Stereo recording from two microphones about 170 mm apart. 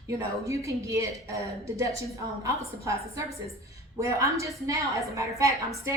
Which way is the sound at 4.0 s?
20° right (ahead or behind).